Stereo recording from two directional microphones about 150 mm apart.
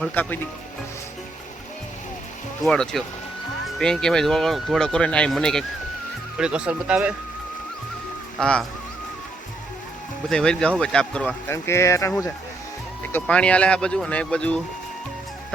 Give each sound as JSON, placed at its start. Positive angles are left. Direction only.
{"t": 0.1, "sound": "speech", "side_deg": 15}
{"t": 2.6, "sound": "speech", "side_deg": 5}
{"t": 8.4, "sound": "speech", "side_deg": 5}
{"t": 10.2, "sound": "speech", "side_deg": 5}
{"t": 11.5, "sound": "speech", "side_deg": 20}
{"t": 13.1, "sound": "speech", "side_deg": 5}